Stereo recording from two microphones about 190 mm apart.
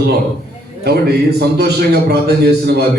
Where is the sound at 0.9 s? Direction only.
60° right (ahead or behind).